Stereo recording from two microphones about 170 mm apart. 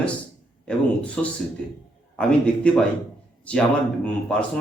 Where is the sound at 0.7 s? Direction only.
5° left (ahead or behind).